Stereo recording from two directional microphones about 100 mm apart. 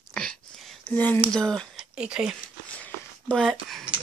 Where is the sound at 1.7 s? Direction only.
10° right (ahead or behind).